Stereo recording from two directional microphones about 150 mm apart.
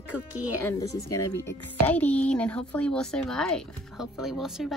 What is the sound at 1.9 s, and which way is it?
Speech, 10° left (ahead or behind).